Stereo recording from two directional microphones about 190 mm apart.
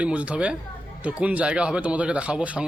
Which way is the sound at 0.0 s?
5° right (ahead or behind).